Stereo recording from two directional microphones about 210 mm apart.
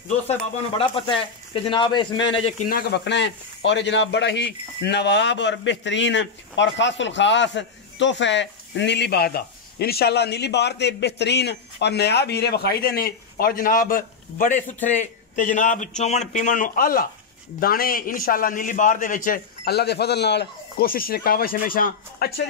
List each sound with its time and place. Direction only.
0.3 s speech: 25° left (ahead or behind)
2.7 s a man's voice: 55° left (ahead or behind)